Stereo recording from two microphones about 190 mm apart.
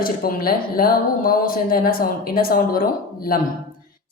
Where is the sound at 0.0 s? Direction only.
50° left (ahead or behind).